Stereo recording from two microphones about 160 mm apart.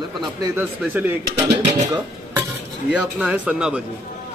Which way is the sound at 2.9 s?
10° right (ahead or behind).